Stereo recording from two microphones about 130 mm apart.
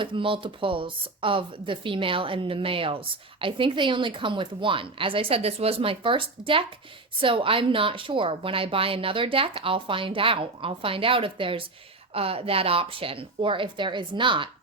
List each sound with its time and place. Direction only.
0.0 s a woman's voice: 40° right (ahead or behind)